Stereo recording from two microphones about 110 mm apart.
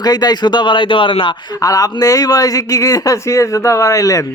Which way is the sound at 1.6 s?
30° left (ahead or behind).